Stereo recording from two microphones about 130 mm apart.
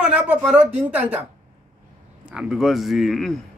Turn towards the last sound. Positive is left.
turn(degrees=0)  # may be behind; listen again after turning